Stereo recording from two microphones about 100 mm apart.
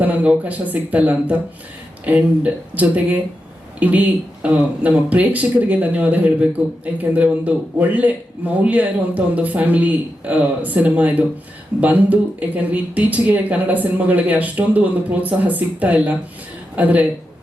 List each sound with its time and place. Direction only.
0.0 s a man's voice: 15° right (ahead or behind)